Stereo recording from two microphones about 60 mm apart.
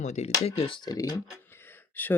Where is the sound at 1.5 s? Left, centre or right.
Left.